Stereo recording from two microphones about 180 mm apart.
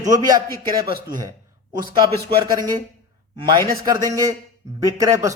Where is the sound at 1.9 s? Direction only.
25° right (ahead or behind).